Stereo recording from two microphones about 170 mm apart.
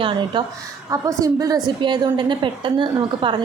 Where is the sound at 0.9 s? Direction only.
20° right (ahead or behind).